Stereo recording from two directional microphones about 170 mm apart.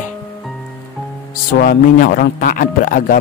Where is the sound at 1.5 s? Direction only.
55° left (ahead or behind).